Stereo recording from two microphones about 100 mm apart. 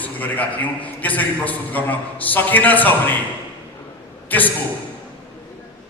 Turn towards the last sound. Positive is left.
turn(degrees=15)  # may be behind; listen again after turning